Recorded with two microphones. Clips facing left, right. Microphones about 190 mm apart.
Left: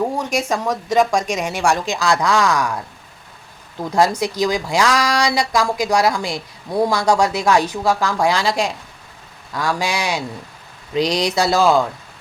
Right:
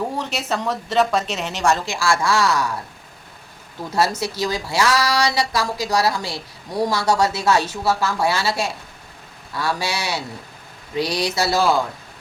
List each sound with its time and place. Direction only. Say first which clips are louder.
0.2 s speech: left 4 dB; 10° left (ahead or behind)
3.9 s speech: left 4 dB; 15° left (ahead or behind)